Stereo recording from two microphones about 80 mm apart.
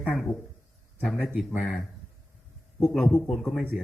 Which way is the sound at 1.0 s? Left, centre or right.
Centre.